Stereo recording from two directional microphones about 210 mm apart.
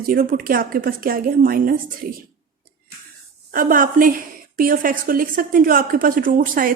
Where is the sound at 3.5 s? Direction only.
40° right (ahead or behind).